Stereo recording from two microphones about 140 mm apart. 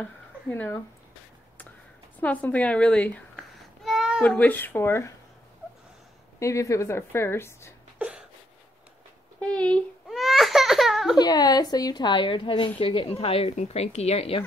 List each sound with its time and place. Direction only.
0.0 s speech: 10° left (ahead or behind)
2.1 s a woman's voice: 10° left (ahead or behind)
3.3 s babbling: centre (ahead or behind)
4.4 s a woman's voice: 15° left (ahead or behind)
6.4 s a woman's voice: 20° left (ahead or behind)
8.0 s a sound: 5° right (ahead or behind)
9.4 s a sound: 10° left (ahead or behind)
11.1 s a woman's voice: 30° left (ahead or behind); by 14.4 s 45° left (ahead or behind)